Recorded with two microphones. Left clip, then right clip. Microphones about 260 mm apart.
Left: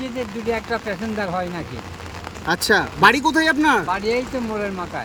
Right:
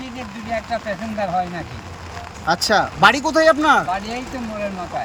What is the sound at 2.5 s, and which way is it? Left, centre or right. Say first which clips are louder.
Speech: right 1 dB; centre.